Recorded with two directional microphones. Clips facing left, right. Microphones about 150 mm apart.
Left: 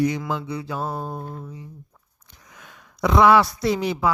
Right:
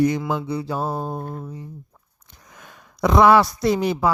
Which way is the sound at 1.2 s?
45° right (ahead or behind).